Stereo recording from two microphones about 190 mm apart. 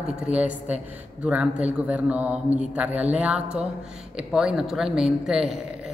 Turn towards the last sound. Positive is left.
turn(degrees=-5)  # may be behind; listen again after turning